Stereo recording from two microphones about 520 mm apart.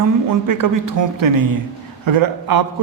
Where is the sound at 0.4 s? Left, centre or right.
Right.